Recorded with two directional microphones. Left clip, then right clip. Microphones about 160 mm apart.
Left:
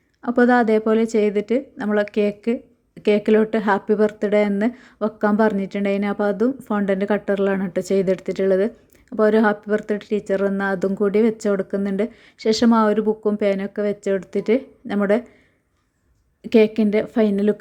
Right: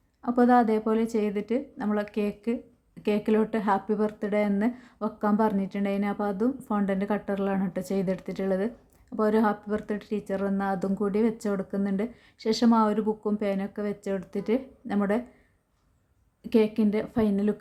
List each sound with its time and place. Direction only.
0.2 s speech: 20° left (ahead or behind)
16.4 s speech: 25° left (ahead or behind)